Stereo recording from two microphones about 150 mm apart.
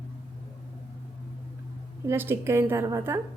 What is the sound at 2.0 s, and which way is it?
A woman's voice, 15° right (ahead or behind).